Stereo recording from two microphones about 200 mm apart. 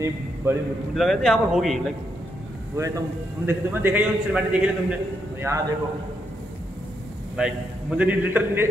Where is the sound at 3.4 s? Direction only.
10° right (ahead or behind).